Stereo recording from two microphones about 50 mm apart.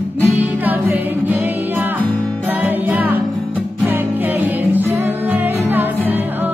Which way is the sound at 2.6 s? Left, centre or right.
Right.